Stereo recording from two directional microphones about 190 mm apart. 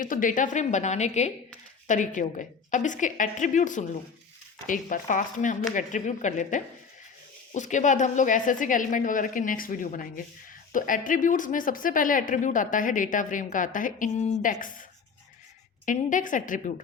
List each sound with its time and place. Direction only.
0.0 s a woman's voice: 45° left (ahead or behind)
15.9 s speech: 45° left (ahead or behind)